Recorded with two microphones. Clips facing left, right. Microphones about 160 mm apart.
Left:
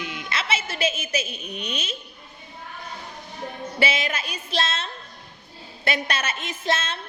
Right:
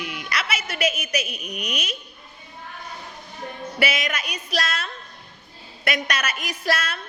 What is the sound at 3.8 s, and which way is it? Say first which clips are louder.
A woman's voice: even; 30° left (ahead or behind).